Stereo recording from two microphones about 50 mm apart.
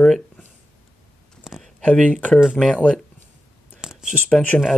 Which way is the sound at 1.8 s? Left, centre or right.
Left.